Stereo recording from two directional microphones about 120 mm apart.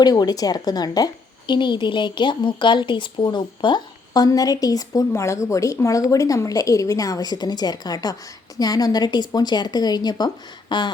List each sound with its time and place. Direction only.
0.0 s a woman's voice: 35° left (ahead or behind)